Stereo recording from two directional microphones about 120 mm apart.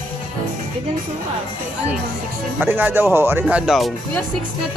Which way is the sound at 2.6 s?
20° right (ahead or behind).